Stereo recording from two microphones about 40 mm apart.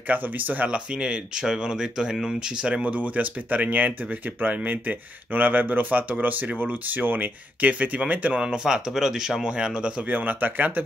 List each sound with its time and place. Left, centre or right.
0.1 s speech: right
0.9 s speech: centre
2.6 s speech: right
8.4 s speech: centre
9.4 s speech: right
10.0 s speech: right